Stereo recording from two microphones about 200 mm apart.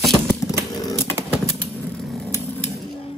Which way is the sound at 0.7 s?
15° left (ahead or behind).